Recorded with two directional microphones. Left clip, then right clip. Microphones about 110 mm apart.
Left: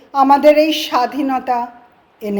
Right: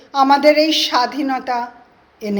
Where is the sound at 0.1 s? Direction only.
35° left (ahead or behind).